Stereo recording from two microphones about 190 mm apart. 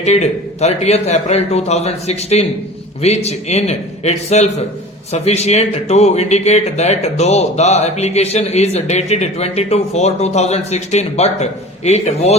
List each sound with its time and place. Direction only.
0.0 s speech: 35° left (ahead or behind)